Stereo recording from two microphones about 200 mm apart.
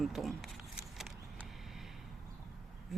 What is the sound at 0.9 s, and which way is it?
Vehicle, centre (ahead or behind).